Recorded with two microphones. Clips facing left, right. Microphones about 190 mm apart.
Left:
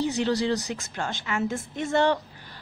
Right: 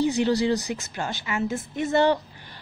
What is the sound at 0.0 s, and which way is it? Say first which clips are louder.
A woman's voice: right 3 dB; 10° right (ahead or behind).